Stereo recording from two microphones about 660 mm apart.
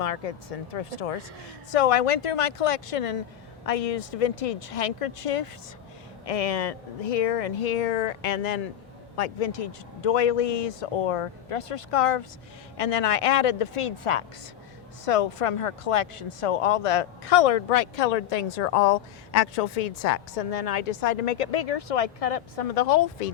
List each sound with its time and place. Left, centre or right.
0.0 s speech: left
9.1 s speech: left